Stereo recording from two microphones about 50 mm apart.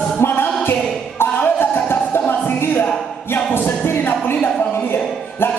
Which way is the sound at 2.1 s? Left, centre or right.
Left.